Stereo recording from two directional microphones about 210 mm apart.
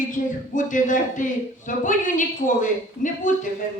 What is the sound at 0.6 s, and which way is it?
A woman's voice, 40° left (ahead or behind).